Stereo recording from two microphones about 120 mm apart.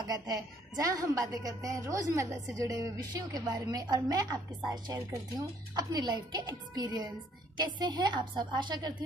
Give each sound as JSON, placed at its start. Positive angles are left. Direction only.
{"t": 0.0, "sound": "a woman's voice", "side_deg": -35}